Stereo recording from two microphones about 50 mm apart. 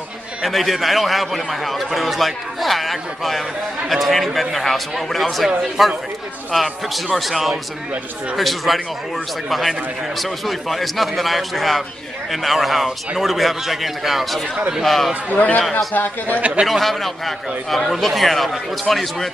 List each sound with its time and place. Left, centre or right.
0.4 s a man's voice: centre
15.3 s speech: left
16.3 s speech: right
16.6 s a man's voice: centre